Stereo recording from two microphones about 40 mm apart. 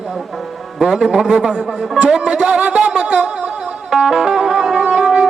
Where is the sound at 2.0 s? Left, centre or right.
Centre.